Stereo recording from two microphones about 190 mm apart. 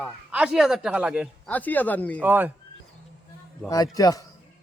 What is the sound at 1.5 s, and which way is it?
Speech, 10° left (ahead or behind).